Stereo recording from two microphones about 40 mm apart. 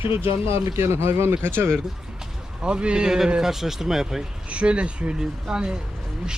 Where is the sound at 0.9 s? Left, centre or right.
Right.